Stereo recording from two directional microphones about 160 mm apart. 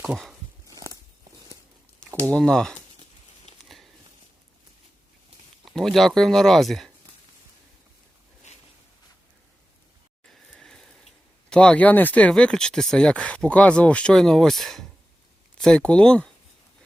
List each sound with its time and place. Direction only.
0.7 s walk: 20° right (ahead or behind)
2.3 s speech: 5° left (ahead or behind)
5.6 s speech: centre (ahead or behind)
10.2 s speech: 5° left (ahead or behind)